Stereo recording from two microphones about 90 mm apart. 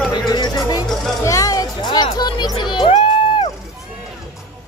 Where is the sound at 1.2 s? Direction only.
40° left (ahead or behind).